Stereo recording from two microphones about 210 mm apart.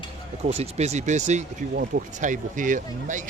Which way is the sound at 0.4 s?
30° right (ahead or behind).